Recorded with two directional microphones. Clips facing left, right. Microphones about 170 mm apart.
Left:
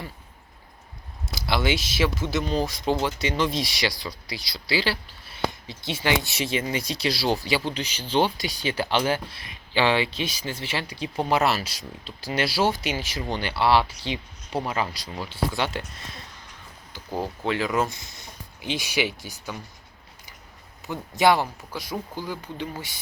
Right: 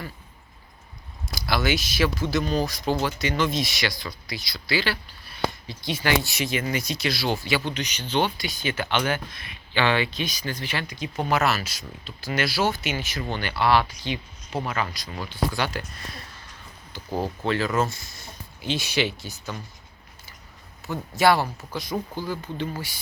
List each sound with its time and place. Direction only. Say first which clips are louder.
1.3 s speech: even; 25° left (ahead or behind)
17.4 s speech: even; 15° left (ahead or behind)
20.8 s speech: even; 15° left (ahead or behind)